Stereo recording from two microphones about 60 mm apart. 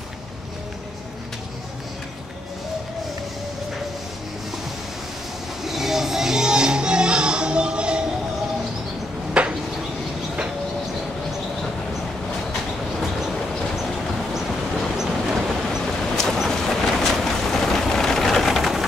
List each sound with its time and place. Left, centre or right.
5.6 s music: centre
9.4 s a sound: centre
15.0 s train: centre
15.8 s vehicle: centre